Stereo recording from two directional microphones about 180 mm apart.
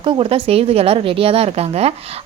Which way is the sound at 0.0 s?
30° right (ahead or behind).